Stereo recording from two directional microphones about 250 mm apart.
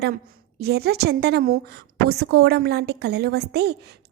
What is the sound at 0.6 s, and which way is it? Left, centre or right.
A woman's voice, right.